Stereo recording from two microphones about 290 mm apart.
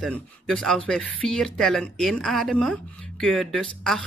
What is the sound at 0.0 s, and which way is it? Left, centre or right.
Speech, centre.